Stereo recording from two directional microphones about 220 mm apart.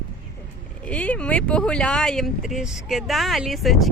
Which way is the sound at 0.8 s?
5° left (ahead or behind).